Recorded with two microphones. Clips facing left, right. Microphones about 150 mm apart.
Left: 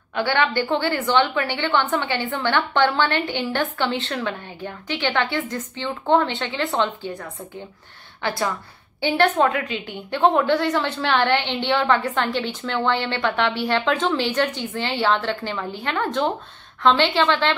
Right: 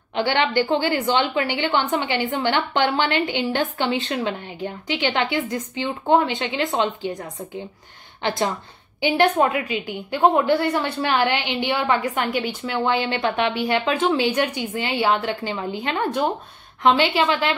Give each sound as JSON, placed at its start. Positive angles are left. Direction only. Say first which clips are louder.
{"t": 0.1, "sound": "a woman's voice", "louder": "right 1 dB", "side_deg": -20}
{"t": 8.2, "sound": "a woman's voice", "louder": "right 2 dB", "side_deg": -20}